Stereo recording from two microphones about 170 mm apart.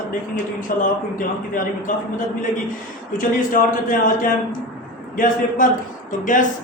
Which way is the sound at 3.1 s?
50° left (ahead or behind).